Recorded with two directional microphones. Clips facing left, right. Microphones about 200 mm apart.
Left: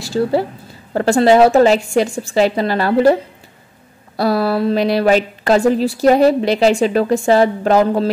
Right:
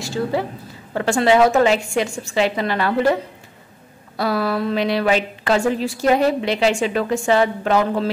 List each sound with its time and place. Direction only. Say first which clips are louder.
0.0 s a woman's voice: left 5 dB; 35° left (ahead or behind)
4.2 s a woman's voice: left 5 dB; 35° left (ahead or behind)